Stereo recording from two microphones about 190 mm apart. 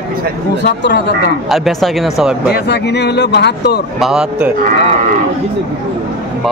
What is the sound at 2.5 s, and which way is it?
Speech, 60° left (ahead or behind).